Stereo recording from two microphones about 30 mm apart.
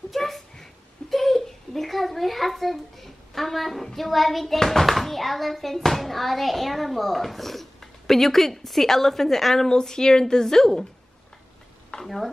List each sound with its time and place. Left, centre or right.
0.1 s a sound: centre
1.1 s a child's voice: centre
9.7 s a woman's voice: left
12.0 s stir: centre